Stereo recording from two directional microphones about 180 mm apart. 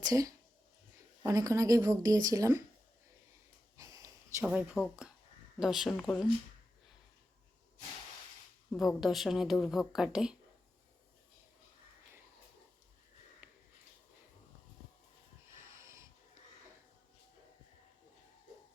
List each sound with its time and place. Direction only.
0.0 s speech: 20° right (ahead or behind)
3.8 s a sound: 20° right (ahead or behind)
4.4 s speech: 5° right (ahead or behind)
8.7 s speech: centre (ahead or behind)
15.4 s snort: 15° right (ahead or behind)